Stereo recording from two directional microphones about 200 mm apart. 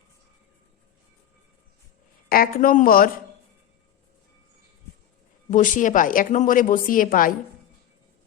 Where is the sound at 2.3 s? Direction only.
45° left (ahead or behind).